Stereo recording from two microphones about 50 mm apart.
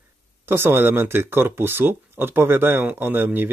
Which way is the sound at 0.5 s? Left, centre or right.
Right.